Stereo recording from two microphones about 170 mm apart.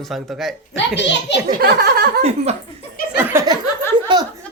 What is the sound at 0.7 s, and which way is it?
Speech, 90° left.